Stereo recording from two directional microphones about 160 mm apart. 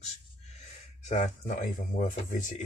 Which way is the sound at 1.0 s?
45° left (ahead or behind).